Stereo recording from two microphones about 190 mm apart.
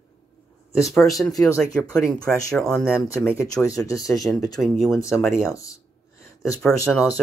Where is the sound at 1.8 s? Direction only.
20° left (ahead or behind).